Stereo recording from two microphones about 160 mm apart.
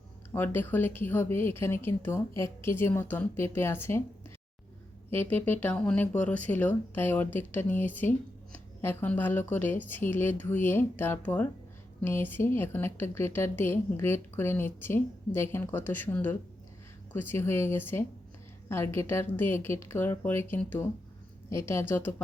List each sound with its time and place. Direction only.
0.3 s a woman's voice: 15° left (ahead or behind)
5.1 s a woman's voice: 10° left (ahead or behind)